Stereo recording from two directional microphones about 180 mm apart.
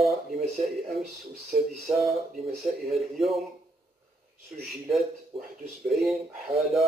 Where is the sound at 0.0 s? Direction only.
Centre (ahead or behind).